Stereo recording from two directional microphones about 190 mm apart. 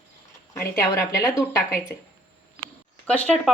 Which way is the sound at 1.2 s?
15° left (ahead or behind).